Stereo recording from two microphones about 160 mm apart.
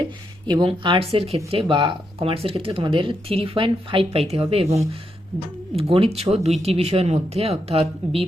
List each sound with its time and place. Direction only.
0.0 s speech: 25° right (ahead or behind)